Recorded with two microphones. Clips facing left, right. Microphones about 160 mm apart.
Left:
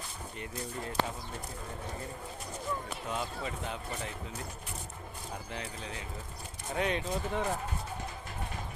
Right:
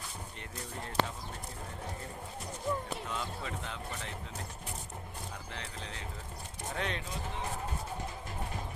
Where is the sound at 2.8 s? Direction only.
10° left (ahead or behind).